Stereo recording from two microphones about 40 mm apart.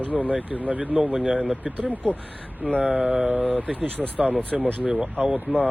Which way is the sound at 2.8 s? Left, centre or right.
Right.